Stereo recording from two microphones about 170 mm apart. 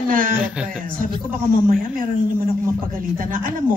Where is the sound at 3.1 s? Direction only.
55° right (ahead or behind).